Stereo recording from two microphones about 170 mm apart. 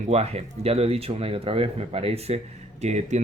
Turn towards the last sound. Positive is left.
turn(degrees=-40)  # may be behind; listen again after turning